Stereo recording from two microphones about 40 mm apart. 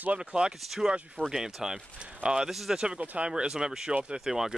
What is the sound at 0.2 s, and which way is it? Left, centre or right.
Speech, right.